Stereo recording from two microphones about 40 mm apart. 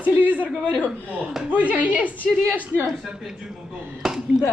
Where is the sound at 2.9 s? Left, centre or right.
Centre.